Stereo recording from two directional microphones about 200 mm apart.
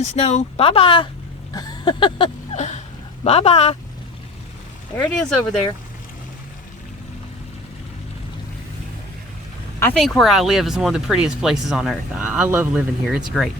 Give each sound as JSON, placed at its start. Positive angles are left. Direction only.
{"t": 0.0, "sound": "speech", "side_deg": 35}
{"t": 1.5, "sound": "a sound", "side_deg": 20}
{"t": 3.2, "sound": "speech", "side_deg": 30}
{"t": 5.0, "sound": "speech", "side_deg": 5}
{"t": 9.8, "sound": "speech", "side_deg": 5}